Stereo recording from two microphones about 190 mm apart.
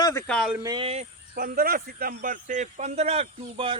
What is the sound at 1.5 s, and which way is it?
Speech, 50° right (ahead or behind).